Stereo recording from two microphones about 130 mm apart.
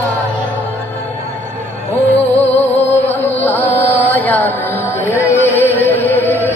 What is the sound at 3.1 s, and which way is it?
Music, 15° left (ahead or behind).